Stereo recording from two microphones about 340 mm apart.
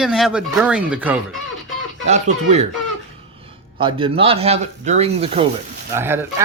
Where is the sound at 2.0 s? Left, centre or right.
Centre.